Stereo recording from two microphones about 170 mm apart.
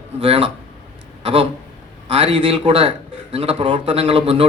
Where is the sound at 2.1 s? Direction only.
30° right (ahead or behind).